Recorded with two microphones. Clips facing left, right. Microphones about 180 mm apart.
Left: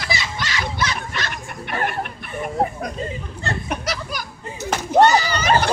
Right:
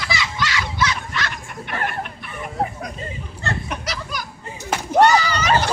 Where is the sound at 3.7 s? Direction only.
55° left (ahead or behind).